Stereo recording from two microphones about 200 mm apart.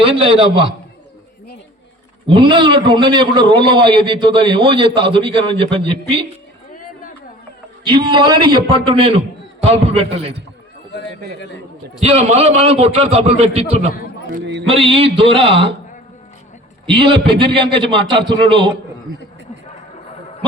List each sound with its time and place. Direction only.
0.0 s a man's voice: 25° right (ahead or behind)
2.2 s a man's voice: 25° right (ahead or behind)
7.9 s a man's voice: 25° right (ahead or behind)
11.9 s a man's voice: 30° right (ahead or behind)
14.4 s music: 60° right (ahead or behind)
14.7 s a man's voice: 30° right (ahead or behind)
16.8 s a man's voice: 25° right (ahead or behind)